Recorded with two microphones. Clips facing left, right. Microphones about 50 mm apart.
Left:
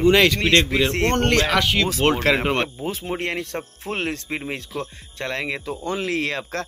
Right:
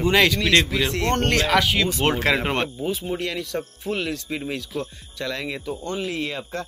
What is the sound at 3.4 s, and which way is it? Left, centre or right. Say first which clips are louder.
Speech: right 2 dB; left.